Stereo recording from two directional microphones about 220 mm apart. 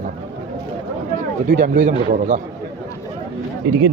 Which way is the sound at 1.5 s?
40° right (ahead or behind).